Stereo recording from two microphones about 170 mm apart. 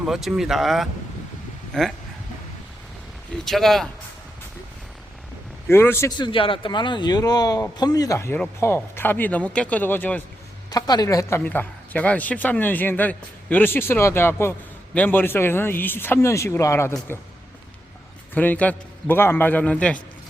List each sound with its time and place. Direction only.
0.0 s speech: centre (ahead or behind)
3.4 s speech: centre (ahead or behind)
5.6 s speech: 15° left (ahead or behind)
6.1 s speech: 25° left (ahead or behind); by 10.2 s 10° left (ahead or behind)
10.7 s speech: 25° left (ahead or behind)
18.3 s speech: 10° left (ahead or behind)